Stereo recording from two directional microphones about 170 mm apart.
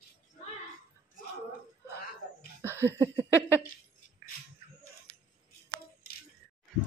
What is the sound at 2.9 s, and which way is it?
Speech, 15° right (ahead or behind).